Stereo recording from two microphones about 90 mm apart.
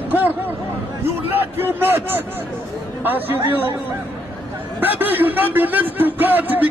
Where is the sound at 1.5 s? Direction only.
25° right (ahead or behind).